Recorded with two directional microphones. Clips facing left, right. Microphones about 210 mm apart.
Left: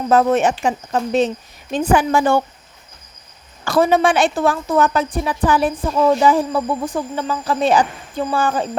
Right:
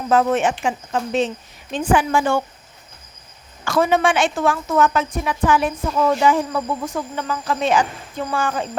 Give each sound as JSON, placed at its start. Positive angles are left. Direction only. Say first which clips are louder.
{"t": 0.1, "sound": "a woman's voice", "louder": "left 2 dB", "side_deg": 40}
{"t": 3.6, "sound": "a woman's voice", "louder": "left 3 dB", "side_deg": 35}